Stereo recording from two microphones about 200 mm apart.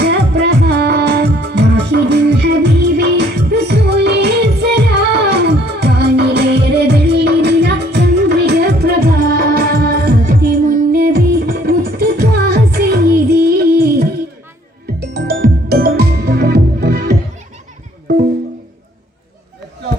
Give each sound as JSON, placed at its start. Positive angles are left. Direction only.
{"t": 0.0, "sound": "music", "side_deg": -55}